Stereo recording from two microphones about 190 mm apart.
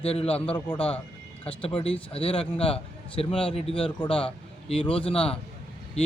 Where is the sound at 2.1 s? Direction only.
30° left (ahead or behind).